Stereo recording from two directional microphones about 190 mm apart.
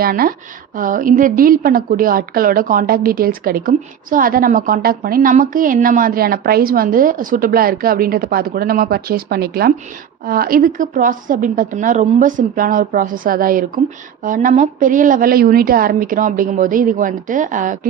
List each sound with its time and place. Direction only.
0.0 s a woman's voice: 50° right (ahead or behind)